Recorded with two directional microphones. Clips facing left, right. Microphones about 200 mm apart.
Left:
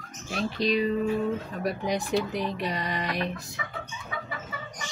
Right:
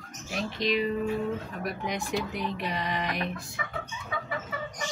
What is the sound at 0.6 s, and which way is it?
Speech, 35° left (ahead or behind).